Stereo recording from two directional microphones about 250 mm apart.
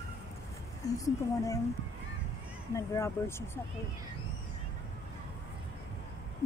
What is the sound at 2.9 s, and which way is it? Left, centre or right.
Speech, centre.